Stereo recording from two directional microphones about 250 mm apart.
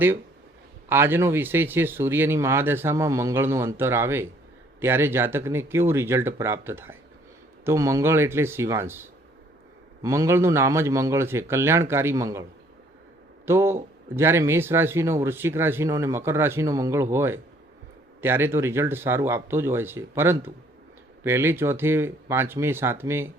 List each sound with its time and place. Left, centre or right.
0.9 s speech: centre